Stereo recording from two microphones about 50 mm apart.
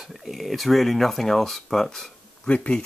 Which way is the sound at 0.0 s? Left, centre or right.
Centre.